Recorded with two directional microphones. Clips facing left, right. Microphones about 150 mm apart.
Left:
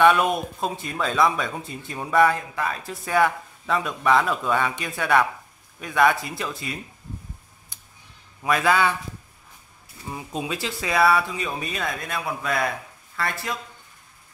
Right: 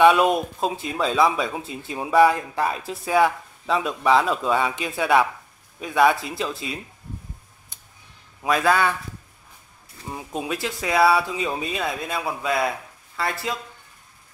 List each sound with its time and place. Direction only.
0.0 s speech: 5° right (ahead or behind)
8.5 s speech: centre (ahead or behind)
10.1 s speech: 5° right (ahead or behind)
11.3 s speech: 20° right (ahead or behind)
11.7 s speech: 5° right (ahead or behind)